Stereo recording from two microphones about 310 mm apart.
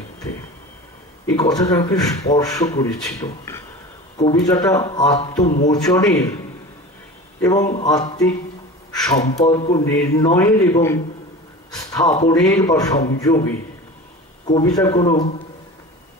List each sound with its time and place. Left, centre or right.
1.2 s speech: centre
7.4 s speech: centre